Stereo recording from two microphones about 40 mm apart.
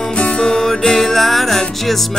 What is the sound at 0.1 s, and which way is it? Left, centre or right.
Music, left.